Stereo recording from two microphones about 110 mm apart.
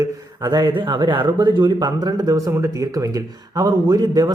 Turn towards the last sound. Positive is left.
turn(degrees=-35)  # may be behind; listen again after turning